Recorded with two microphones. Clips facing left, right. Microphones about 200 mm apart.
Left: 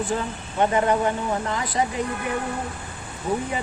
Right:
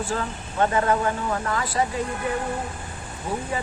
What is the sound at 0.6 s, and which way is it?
Speech, 20° left (ahead or behind).